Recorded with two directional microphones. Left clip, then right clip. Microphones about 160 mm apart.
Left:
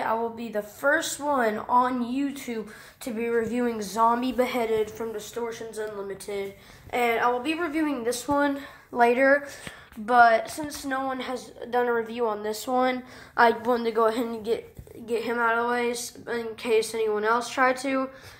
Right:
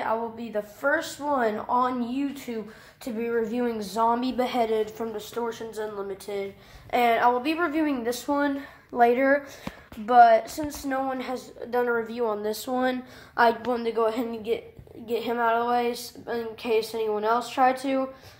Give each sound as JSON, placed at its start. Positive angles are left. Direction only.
{"t": 0.0, "sound": "a woman's voice", "side_deg": 20}
{"t": 13.4, "sound": "a woman's voice", "side_deg": 10}
{"t": 15.0, "sound": "a woman's voice", "side_deg": 5}